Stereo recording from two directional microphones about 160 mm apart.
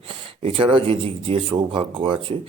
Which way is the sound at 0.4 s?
35° right (ahead or behind).